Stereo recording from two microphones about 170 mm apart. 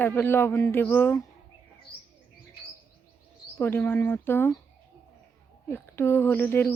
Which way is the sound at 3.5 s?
10° left (ahead or behind).